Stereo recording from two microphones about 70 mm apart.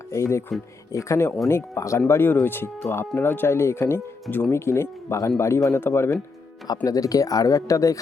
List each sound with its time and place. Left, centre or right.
0.1 s speech: left
6.7 s speech: left